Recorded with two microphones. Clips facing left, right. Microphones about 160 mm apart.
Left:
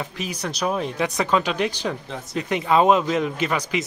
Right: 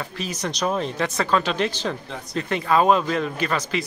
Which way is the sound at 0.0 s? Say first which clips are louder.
Even; 15° left (ahead or behind).